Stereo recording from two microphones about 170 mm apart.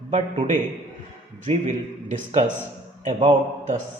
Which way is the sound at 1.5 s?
45° right (ahead or behind).